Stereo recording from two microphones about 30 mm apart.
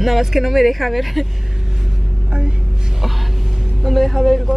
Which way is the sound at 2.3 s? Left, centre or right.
Right.